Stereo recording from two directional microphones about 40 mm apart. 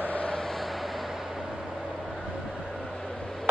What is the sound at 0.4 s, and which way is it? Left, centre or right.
Vehicle, centre.